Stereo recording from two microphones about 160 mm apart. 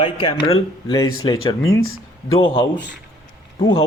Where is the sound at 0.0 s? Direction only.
30° left (ahead or behind).